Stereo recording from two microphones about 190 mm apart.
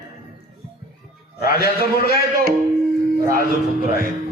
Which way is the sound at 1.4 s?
55° left (ahead or behind).